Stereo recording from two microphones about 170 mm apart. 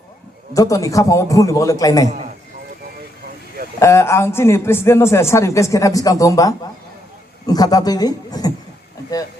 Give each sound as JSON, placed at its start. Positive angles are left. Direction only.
{"t": 0.5, "sound": "a man's voice", "side_deg": 20}
{"t": 3.8, "sound": "a man's voice", "side_deg": 15}